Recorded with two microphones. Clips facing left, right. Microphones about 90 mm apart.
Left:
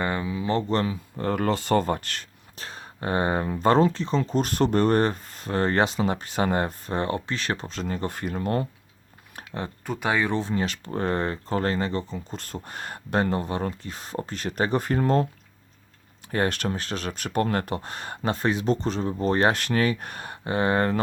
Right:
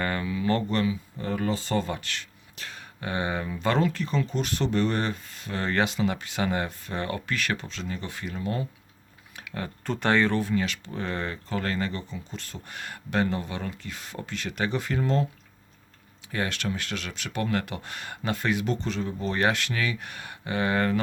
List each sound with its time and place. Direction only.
0.0 s speech: 20° left (ahead or behind)
0.7 s speech: 35° left (ahead or behind)
1.2 s speech: 55° left (ahead or behind)
9.3 s a sound: 45° left (ahead or behind)
9.8 s speech: 10° left (ahead or behind)
10.4 s speech: 35° left (ahead or behind)